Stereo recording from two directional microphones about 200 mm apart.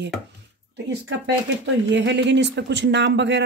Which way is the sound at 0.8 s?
65° right (ahead or behind).